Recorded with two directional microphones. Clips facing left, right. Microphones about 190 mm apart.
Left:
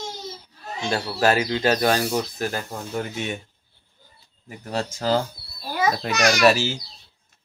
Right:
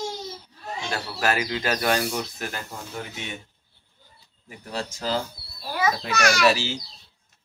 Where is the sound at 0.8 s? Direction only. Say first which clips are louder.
Left 6 dB; 30° left (ahead or behind).